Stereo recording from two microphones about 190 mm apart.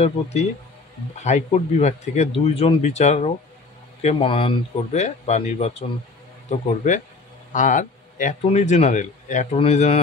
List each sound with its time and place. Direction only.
0.0 s a man's voice: 35° left (ahead or behind)